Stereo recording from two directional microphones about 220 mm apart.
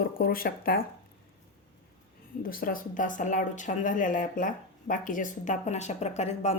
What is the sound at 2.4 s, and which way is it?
Speech, 40° left (ahead or behind).